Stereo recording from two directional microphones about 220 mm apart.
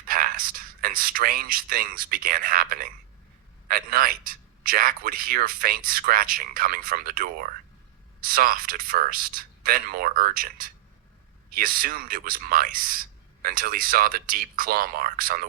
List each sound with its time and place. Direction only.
0.0 s speech: 40° right (ahead or behind)